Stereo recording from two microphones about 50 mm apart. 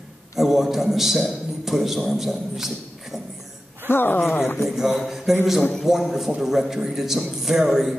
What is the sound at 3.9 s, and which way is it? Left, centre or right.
Speech, left.